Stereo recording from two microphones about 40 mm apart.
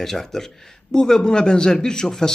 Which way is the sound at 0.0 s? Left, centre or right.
Centre.